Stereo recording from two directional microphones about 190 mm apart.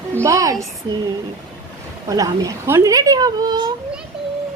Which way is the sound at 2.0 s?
20° right (ahead or behind).